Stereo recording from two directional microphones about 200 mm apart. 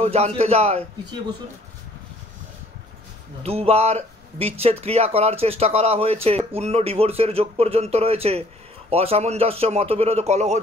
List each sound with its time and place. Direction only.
0.0 s speech: 30° right (ahead or behind)
3.4 s speech: 30° right (ahead or behind)